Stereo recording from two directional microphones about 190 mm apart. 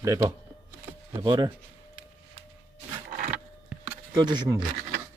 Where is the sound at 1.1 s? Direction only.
20° right (ahead or behind).